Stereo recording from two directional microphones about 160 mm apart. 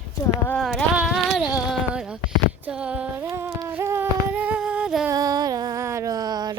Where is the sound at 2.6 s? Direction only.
5° right (ahead or behind).